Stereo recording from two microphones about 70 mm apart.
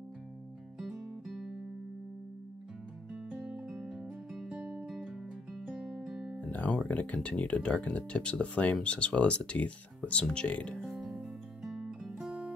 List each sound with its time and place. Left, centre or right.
0.7 s music: centre
3.3 s music: centre
4.8 s music: centre
6.5 s speech: left
10.8 s music: centre